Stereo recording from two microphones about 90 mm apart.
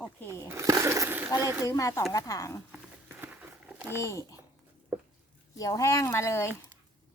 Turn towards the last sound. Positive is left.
turn(degrees=30)  # may be behind; listen again after turning